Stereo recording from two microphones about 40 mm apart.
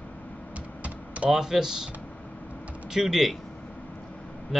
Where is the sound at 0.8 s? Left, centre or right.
Right.